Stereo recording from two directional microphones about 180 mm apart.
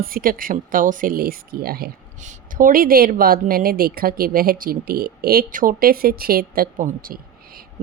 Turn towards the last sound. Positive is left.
turn(degrees=-55)  # may be behind; listen again after turning